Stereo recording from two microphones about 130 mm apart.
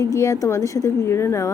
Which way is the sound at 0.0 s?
25° left (ahead or behind).